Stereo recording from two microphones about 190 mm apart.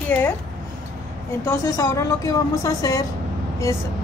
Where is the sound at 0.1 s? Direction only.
10° left (ahead or behind).